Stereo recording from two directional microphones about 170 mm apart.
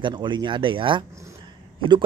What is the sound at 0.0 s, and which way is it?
Speech, 25° right (ahead or behind).